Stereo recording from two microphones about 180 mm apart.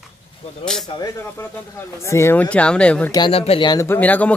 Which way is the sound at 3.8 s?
10° left (ahead or behind).